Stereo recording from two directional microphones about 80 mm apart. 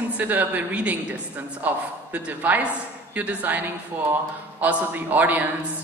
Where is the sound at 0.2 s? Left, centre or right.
Right.